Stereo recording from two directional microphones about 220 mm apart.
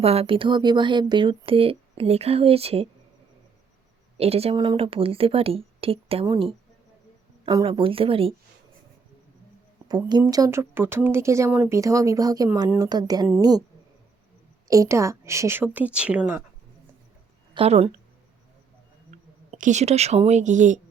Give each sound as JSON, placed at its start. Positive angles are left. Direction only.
{"t": 0.0, "sound": "speech", "side_deg": -25}
{"t": 4.2, "sound": "speech", "side_deg": -25}
{"t": 9.9, "sound": "speech", "side_deg": -20}
{"t": 14.7, "sound": "speech", "side_deg": -15}
{"t": 17.5, "sound": "a woman's voice", "side_deg": -25}
{"t": 19.1, "sound": "speech", "side_deg": -35}